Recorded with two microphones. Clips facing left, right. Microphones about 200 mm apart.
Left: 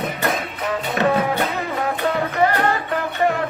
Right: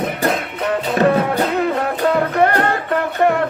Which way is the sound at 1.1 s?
60° right (ahead or behind).